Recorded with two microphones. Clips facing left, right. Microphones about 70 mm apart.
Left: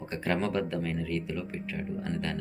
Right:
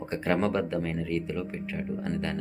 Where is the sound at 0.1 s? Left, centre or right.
Right.